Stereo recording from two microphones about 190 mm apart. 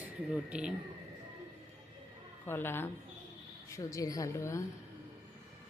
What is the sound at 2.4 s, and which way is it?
A woman's voice, 10° left (ahead or behind).